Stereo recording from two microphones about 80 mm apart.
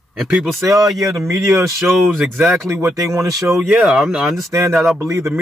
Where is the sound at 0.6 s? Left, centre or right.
Right.